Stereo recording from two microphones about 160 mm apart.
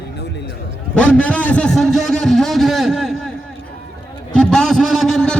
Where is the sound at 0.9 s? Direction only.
5° left (ahead or behind).